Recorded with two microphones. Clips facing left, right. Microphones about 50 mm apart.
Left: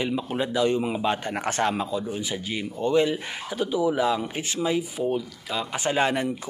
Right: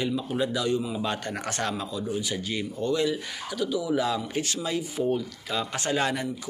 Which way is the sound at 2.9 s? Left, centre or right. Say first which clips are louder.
Left 5 dB; left.